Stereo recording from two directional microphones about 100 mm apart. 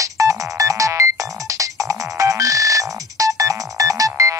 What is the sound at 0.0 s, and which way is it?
Music, 35° right (ahead or behind).